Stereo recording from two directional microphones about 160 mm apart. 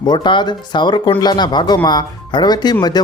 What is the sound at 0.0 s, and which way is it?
Speech, 25° left (ahead or behind).